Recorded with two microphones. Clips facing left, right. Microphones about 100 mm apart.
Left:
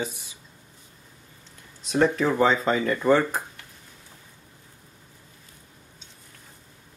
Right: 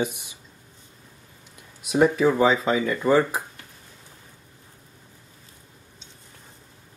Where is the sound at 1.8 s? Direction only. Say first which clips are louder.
Right 3 dB; 10° right (ahead or behind).